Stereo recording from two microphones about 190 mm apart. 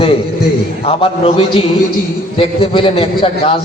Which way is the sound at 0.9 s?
30° left (ahead or behind).